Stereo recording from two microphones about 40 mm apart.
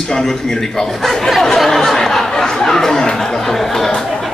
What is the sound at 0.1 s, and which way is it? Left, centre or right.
A man's voice, centre.